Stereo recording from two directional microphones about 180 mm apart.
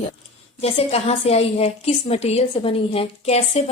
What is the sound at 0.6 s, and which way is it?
A woman's voice, 35° left (ahead or behind).